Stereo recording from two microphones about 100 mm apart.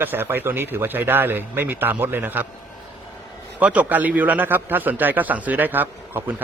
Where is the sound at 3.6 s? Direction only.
15° right (ahead or behind).